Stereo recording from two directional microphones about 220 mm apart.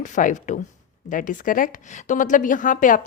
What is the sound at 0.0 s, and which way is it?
A woman's voice, 35° left (ahead or behind).